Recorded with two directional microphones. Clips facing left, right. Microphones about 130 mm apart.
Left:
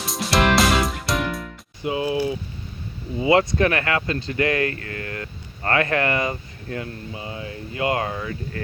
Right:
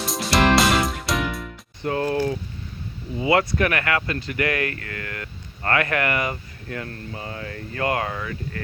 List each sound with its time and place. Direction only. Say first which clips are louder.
0.0 s music: right 1 dB; centre (ahead or behind)
1.9 s speech: even; 10° left (ahead or behind)
3.2 s speech: left 2 dB; 25° left (ahead or behind)